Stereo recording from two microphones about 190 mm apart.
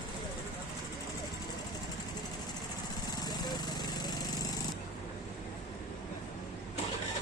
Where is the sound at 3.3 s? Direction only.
20° left (ahead or behind).